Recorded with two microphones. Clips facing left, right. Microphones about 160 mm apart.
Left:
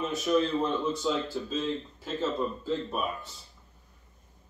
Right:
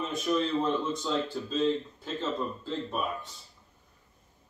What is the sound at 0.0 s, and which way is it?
A man's voice, 5° left (ahead or behind).